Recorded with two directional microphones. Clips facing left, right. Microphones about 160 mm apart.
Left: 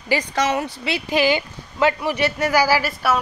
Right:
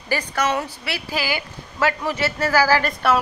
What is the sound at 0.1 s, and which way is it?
A woman's voice, 10° left (ahead or behind).